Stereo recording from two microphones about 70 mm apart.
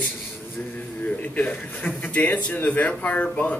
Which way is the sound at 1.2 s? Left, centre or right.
Left.